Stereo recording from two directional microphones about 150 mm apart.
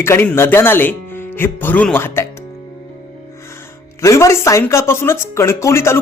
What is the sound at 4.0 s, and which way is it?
Speech, 20° left (ahead or behind).